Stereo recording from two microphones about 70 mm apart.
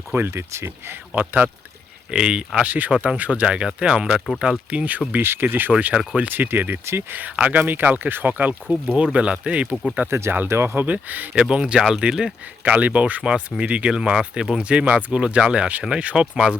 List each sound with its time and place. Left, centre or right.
0.1 s speech: right
1.1 s speech: right
2.0 s speech: centre
10.1 s speech: right
10.8 s speech: right
11.4 s speech: centre